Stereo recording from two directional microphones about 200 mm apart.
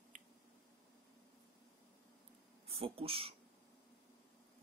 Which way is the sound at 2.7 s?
30° right (ahead or behind).